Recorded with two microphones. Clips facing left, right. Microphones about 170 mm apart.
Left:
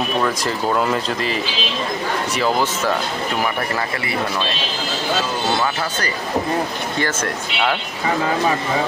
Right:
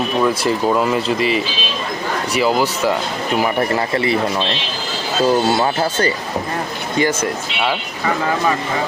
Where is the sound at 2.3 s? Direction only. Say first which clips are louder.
Right 4 dB; 10° right (ahead or behind).